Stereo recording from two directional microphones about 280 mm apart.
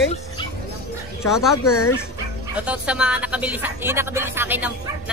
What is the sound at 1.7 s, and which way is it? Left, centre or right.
Speech, left.